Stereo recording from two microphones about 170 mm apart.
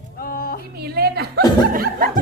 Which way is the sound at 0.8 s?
70° right (ahead or behind).